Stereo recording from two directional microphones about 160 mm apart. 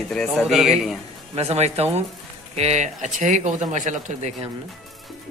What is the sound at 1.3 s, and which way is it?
Speech, 40° right (ahead or behind).